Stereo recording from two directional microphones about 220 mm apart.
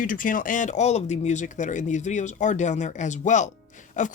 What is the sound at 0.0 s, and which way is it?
Speech, 40° left (ahead or behind).